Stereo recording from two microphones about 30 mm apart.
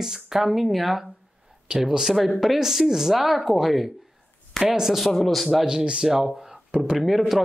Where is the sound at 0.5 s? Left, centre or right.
Centre.